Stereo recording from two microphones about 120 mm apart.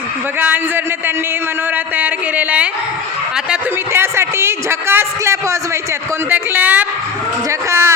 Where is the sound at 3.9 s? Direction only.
20° right (ahead or behind).